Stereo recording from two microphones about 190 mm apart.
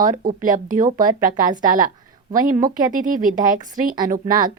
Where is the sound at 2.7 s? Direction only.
45° right (ahead or behind).